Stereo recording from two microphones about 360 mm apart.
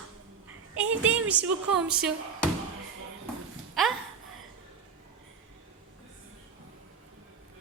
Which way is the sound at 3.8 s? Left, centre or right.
Centre.